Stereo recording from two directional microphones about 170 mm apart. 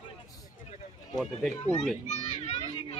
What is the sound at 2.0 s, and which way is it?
Children playing, 40° left (ahead or behind).